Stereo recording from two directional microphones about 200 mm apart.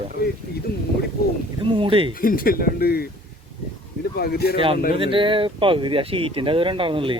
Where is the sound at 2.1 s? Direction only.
45° left (ahead or behind).